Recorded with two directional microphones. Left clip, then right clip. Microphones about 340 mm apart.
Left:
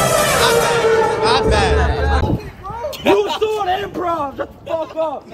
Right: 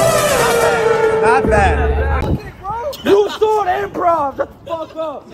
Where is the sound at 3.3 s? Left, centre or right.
Centre.